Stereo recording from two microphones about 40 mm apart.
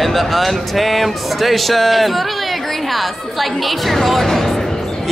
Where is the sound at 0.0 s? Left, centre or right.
Centre.